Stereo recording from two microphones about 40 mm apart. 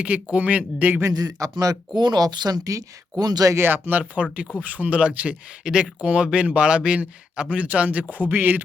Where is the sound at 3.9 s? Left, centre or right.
Right.